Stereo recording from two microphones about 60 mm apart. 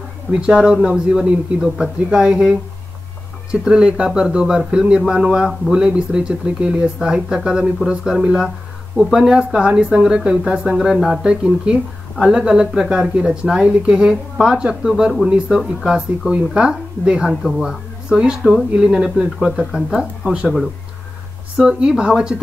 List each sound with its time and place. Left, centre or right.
0.3 s a man's voice: centre
3.6 s a man's voice: centre
21.7 s a man's voice: centre